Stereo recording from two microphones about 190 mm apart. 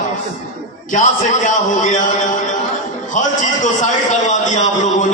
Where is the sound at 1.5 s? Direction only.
40° left (ahead or behind).